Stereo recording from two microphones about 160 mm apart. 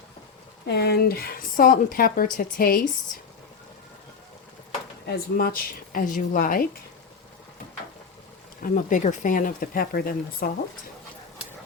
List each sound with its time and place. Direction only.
0.7 s speech: 90° left; by 2.8 s 65° left (ahead or behind)
5.0 s speech: 70° left (ahead or behind)
8.6 s speech: 55° left (ahead or behind)